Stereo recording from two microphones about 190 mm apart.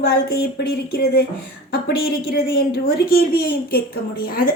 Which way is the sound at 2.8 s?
50° left (ahead or behind).